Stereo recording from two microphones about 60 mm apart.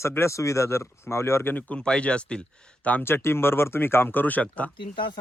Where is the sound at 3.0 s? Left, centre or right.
Left.